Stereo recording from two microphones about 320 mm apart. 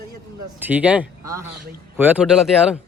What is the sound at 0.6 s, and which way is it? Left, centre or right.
Speech, centre.